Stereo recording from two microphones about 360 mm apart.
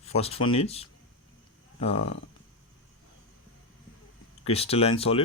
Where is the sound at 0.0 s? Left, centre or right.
Centre.